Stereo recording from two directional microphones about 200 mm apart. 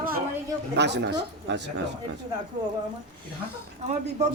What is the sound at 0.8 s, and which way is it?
Speech, 60° right (ahead or behind).